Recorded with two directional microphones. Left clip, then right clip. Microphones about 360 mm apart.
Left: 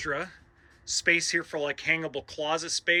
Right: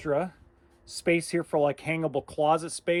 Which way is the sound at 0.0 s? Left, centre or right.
Centre.